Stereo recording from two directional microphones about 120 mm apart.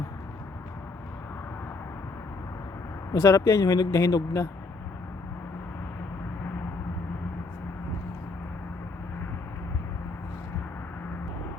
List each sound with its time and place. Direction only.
3.1 s speech: 30° left (ahead or behind)